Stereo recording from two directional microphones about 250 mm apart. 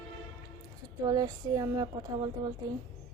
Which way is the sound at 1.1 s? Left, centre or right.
Centre.